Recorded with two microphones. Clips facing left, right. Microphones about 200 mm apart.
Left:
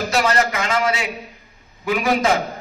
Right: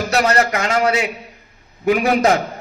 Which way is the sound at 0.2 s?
40° right (ahead or behind).